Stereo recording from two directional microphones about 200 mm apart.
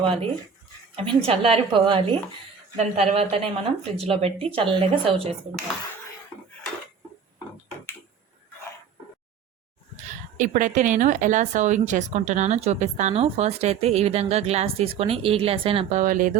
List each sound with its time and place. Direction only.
0.0 s a woman's voice: 25° right (ahead or behind)
10.3 s speech: 40° right (ahead or behind)